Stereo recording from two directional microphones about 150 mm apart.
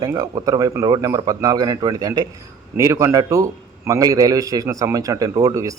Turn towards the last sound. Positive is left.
turn(degrees=-20)  # may be behind; listen again after turning